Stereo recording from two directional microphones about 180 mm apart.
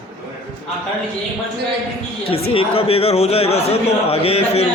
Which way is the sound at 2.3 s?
30° left (ahead or behind).